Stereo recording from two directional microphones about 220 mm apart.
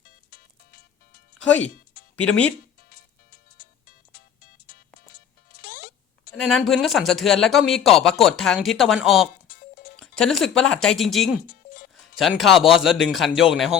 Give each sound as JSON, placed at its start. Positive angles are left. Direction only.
{"t": 0.3, "sound": "music", "side_deg": 40}
{"t": 2.1, "sound": "speech", "side_deg": 5}
{"t": 5.5, "sound": "music", "side_deg": 45}
{"t": 6.3, "sound": "speech", "side_deg": 0}
{"t": 11.4, "sound": "music", "side_deg": 40}
{"t": 12.1, "sound": "speech", "side_deg": 0}